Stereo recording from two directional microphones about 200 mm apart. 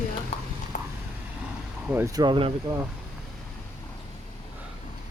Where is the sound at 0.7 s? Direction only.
40° left (ahead or behind).